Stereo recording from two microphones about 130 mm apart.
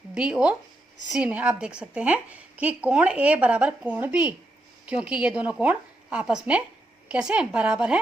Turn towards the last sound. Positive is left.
turn(degrees=-10)  # may be behind; listen again after turning